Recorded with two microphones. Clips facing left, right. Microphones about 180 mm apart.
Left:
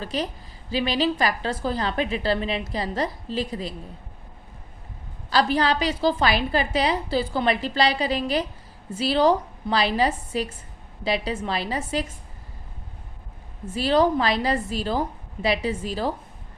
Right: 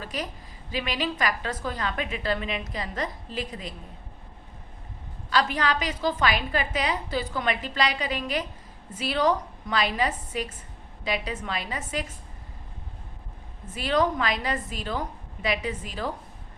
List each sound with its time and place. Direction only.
0.0 s a woman's voice: 30° left (ahead or behind)
5.3 s a woman's voice: 35° left (ahead or behind)
13.7 s a woman's voice: 30° left (ahead or behind)